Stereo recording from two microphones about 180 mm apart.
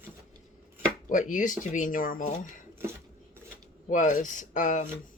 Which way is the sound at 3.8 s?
45° left (ahead or behind).